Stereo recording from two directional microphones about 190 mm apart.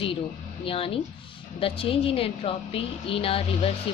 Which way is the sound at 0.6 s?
30° left (ahead or behind).